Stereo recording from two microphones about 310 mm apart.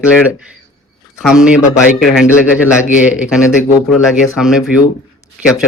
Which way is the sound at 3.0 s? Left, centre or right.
Centre.